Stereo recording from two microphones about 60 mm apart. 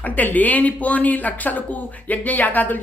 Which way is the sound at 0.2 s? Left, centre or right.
Left.